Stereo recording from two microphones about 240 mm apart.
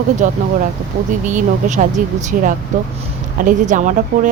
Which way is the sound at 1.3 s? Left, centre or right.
Right.